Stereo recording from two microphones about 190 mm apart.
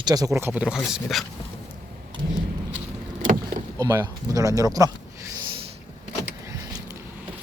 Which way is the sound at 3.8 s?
15° right (ahead or behind).